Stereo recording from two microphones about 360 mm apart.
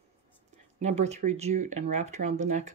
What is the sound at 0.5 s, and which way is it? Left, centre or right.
Speech, centre.